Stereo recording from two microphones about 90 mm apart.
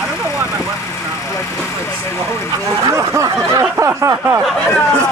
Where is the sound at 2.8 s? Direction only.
35° right (ahead or behind).